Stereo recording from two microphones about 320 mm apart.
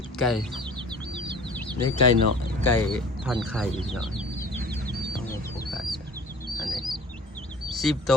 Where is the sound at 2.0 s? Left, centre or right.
Right.